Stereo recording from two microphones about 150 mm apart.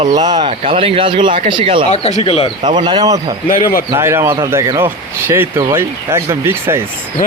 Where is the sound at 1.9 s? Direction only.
50° left (ahead or behind).